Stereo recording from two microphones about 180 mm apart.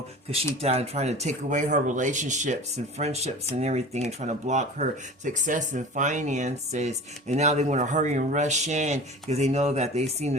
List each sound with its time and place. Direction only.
0.3 s speech: 35° right (ahead or behind)